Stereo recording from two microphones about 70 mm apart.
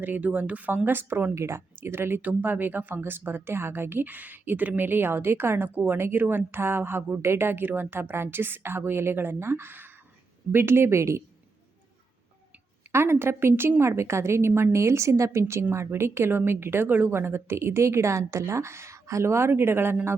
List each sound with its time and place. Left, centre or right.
0.0 s speech: right
1.4 s a woman's voice: right
12.9 s a woman's voice: right